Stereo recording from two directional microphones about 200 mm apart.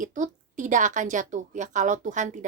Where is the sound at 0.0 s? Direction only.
40° right (ahead or behind).